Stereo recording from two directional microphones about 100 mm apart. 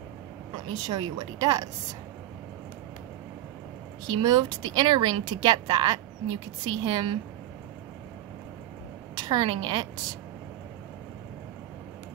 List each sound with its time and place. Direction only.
0.8 s a woman's voice: 40° right (ahead or behind)
4.2 s speech: 45° right (ahead or behind)
9.1 s a woman's voice: 45° right (ahead or behind)